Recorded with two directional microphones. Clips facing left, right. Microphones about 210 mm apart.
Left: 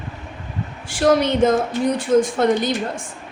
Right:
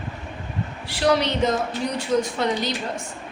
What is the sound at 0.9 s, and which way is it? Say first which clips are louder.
A woman's voice: left 4 dB; 45° left (ahead or behind).